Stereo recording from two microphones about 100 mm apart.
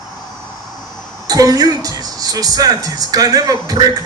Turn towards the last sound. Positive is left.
turn(degrees=-40)  # may be behind; listen again after turning